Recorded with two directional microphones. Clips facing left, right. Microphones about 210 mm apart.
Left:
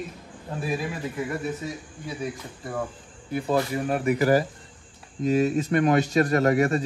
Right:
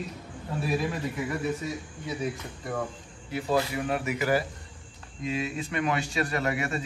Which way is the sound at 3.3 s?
50° left (ahead or behind).